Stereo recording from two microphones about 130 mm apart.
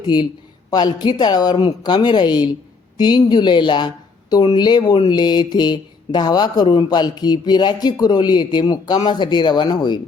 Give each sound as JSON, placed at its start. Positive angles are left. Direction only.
{"t": 0.7, "sound": "speech", "side_deg": 30}